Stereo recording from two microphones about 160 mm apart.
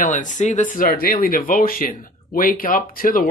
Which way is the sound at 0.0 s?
50° left (ahead or behind).